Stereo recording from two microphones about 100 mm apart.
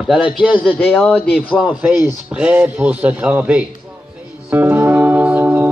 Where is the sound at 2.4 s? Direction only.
10° right (ahead or behind).